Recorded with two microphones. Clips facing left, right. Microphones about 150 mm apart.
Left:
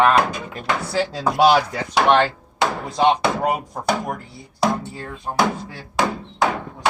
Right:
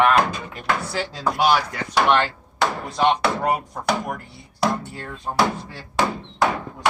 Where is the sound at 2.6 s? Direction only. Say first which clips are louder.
Left 2 dB; 15° left (ahead or behind).